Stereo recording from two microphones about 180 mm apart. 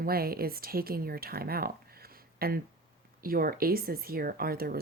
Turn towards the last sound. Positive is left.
turn(degrees=-55)  # may be behind; listen again after turning